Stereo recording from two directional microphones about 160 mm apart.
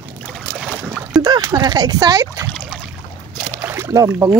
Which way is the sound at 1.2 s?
25° right (ahead or behind).